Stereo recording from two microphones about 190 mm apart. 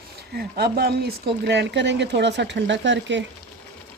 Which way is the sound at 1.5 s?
65° right (ahead or behind).